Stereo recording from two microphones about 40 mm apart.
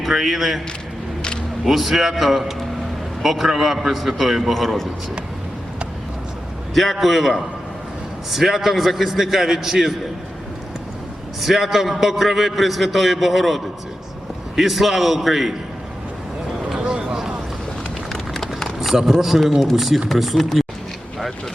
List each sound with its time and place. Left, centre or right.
0.0 s a man's voice: centre
1.6 s a man's voice: centre
6.9 s a man's voice: centre
11.3 s a man's voice: centre
16.8 s a sound: right
18.1 s run: centre
18.8 s a sound: centre
19.2 s a man's voice: centre